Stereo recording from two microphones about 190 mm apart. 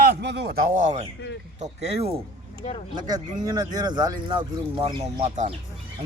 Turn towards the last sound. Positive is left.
turn(degrees=-40)  # may be behind; listen again after turning